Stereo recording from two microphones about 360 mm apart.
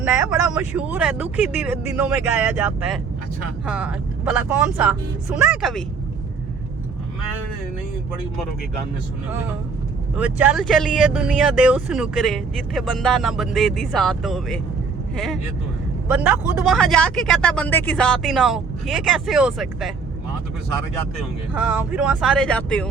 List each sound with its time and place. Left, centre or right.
0.0 s speech: centre
10.2 s speech: centre
21.5 s speech: centre